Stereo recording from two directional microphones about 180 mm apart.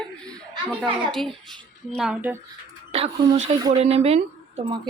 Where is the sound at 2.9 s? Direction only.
35° right (ahead or behind).